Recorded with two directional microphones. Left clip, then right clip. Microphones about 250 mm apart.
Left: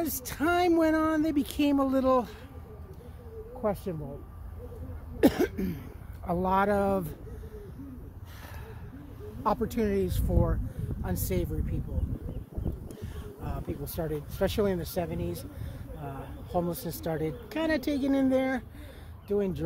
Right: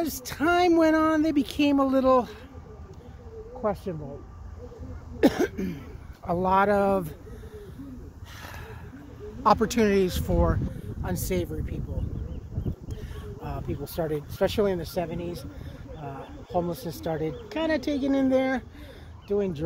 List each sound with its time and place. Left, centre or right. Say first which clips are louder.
0.0 s speech: right 3 dB; centre
3.6 s speech: right 2 dB; centre
5.2 s cough: right 2 dB; centre
6.2 s speech: right 4 dB; centre
9.4 s speech: right 7 dB; centre
13.9 s speech: right 5 dB; right
14.4 s speech: right 3 dB; centre